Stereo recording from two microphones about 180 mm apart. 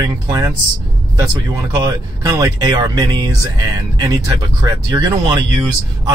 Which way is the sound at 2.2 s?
20° right (ahead or behind).